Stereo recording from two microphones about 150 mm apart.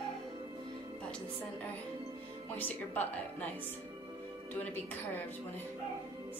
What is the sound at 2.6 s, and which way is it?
Speech, 10° left (ahead or behind).